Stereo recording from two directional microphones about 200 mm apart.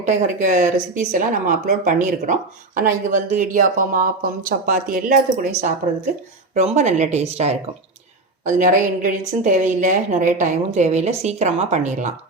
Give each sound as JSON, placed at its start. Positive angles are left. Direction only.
{"t": 0.0, "sound": "speech", "side_deg": -35}